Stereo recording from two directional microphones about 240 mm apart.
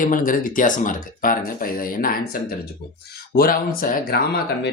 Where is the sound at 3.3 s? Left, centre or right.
Left.